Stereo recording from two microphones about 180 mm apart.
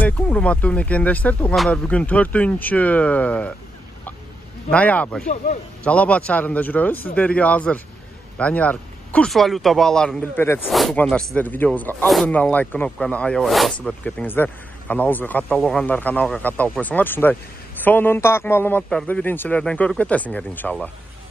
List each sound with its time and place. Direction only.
0.0 s speech: 5° left (ahead or behind)
4.6 s speech: 10° left (ahead or behind)
5.2 s speech: 45° left (ahead or behind)
5.9 s speech: 10° left (ahead or behind)
10.7 s speech: centre (ahead or behind)